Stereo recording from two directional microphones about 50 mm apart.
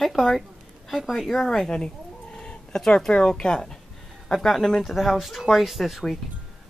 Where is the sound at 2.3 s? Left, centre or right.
Centre.